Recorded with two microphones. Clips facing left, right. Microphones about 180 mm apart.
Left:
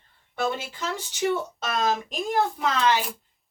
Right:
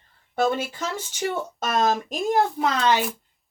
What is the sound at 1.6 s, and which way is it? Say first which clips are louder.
Speech: right 7 dB; 45° right (ahead or behind).